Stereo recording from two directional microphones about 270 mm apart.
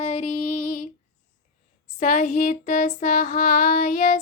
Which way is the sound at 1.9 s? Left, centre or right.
Left.